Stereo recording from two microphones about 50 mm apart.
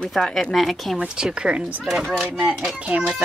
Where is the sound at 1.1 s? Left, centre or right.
Centre.